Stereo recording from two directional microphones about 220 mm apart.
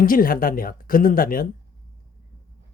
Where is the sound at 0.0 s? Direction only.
40° left (ahead or behind).